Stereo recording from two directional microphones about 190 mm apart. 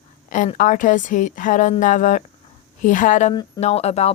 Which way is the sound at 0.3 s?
45° left (ahead or behind).